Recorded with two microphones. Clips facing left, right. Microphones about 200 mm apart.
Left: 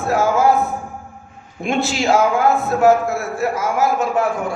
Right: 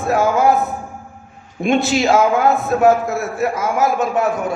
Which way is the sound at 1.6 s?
20° right (ahead or behind).